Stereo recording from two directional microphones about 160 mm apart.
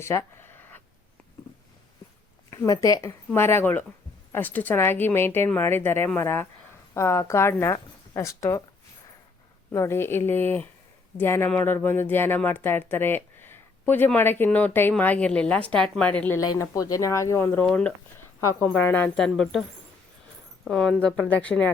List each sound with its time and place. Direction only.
0.0 s a sound: 15° left (ahead or behind)
2.5 s speech: 20° left (ahead or behind)
9.7 s speech: 15° left (ahead or behind)
16.4 s speech: 20° left (ahead or behind)
18.3 s speech: 15° left (ahead or behind)
20.7 s speech: 5° left (ahead or behind)